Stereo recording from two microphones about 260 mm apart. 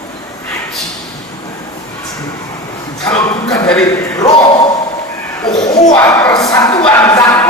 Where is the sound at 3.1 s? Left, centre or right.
Centre.